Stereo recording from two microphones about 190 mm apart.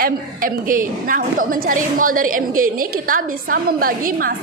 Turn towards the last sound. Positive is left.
turn(degrees=-50)  # may be behind; listen again after turning